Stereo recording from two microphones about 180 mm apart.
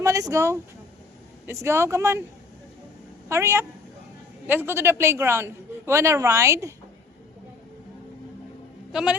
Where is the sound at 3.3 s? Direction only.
15° right (ahead or behind).